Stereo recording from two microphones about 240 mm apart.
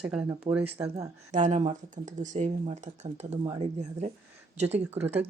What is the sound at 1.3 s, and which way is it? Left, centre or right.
Speech, right.